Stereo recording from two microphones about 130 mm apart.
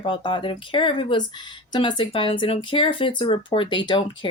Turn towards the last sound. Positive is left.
turn(degrees=40)  # may be behind; listen again after turning